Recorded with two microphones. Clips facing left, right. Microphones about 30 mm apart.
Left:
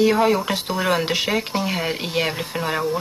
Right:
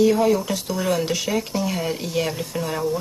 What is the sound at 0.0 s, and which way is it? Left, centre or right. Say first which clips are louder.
Speech: even; left.